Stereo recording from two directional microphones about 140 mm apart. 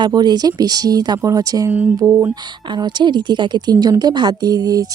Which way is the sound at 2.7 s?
35° right (ahead or behind).